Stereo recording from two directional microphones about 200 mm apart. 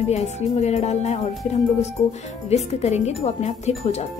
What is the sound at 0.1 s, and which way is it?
Speech, 35° left (ahead or behind).